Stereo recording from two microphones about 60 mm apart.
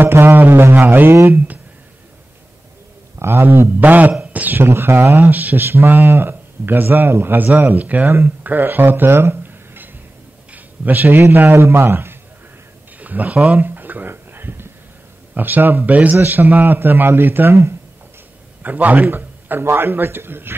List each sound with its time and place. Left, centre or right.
0.0 s speech: right
3.2 s speech: right
3.8 s speech: right
5.3 s speech: right
10.5 s a sound: right
11.3 s speech: right
13.0 s a sound: right
15.3 s speech: right
18.6 s a man's voice: right